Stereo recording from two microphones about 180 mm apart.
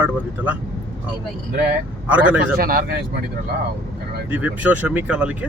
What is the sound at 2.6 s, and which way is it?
Speech, 60° right (ahead or behind).